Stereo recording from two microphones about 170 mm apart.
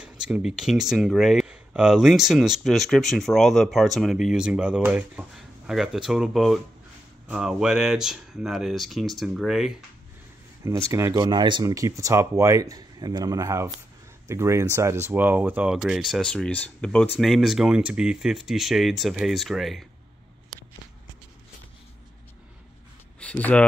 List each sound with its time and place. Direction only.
0.0 s speech: 5° right (ahead or behind)
10.6 s speech: 20° right (ahead or behind); by 19.9 s centre (ahead or behind)
23.1 s a sound: 5° left (ahead or behind)